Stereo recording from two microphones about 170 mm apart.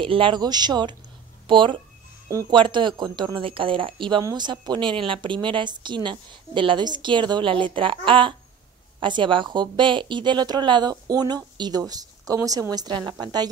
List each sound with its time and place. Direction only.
0.0 s speech: 30° right (ahead or behind)
2.2 s speech: 20° right (ahead or behind)